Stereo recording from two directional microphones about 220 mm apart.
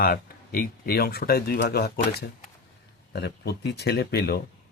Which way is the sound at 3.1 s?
50° left (ahead or behind).